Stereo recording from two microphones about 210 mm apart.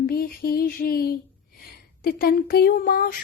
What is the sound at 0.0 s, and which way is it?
Speech, 45° left (ahead or behind).